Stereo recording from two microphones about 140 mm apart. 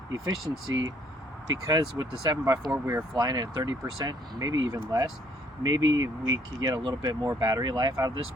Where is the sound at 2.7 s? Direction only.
15° right (ahead or behind).